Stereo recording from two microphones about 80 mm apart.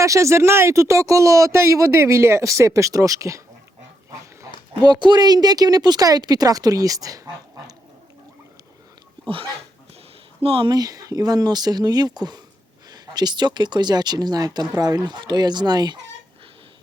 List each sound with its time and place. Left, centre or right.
0.0 s speech: right
4.7 s speech: right
10.6 s speech: right